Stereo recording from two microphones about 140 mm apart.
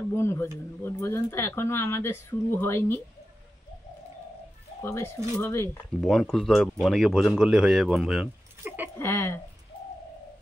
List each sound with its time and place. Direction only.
0.1 s speech: 20° left (ahead or behind)
4.8 s speech: 20° left (ahead or behind)
5.9 s speech: 5° left (ahead or behind)
8.6 s a sound: 15° right (ahead or behind)
8.9 s speech: 15° left (ahead or behind)